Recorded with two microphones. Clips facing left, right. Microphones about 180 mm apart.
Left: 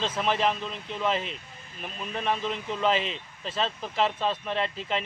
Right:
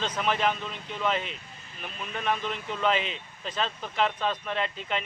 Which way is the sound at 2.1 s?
30° left (ahead or behind).